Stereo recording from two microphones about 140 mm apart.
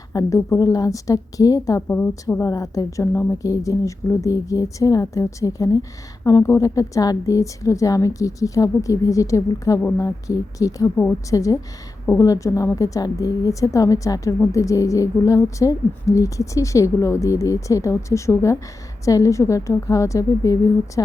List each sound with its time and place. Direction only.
0.1 s a woman's voice: 25° left (ahead or behind)